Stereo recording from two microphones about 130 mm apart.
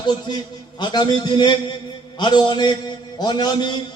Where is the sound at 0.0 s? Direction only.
35° left (ahead or behind).